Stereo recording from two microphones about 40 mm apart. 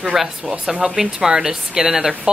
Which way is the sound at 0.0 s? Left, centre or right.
Centre.